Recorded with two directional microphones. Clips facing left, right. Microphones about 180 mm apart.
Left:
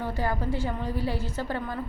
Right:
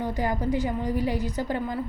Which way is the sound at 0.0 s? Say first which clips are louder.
Right 2 dB; 15° right (ahead or behind).